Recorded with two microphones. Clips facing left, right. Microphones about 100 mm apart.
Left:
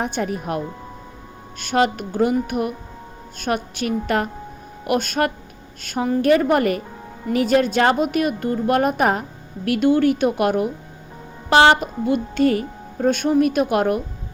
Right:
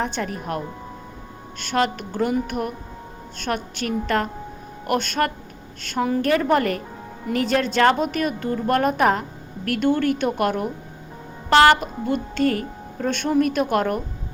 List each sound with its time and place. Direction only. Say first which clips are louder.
0.0 s a woman's voice: left 2 dB; 15° left (ahead or behind)